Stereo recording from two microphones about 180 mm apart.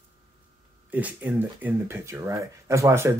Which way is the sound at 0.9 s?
10° right (ahead or behind).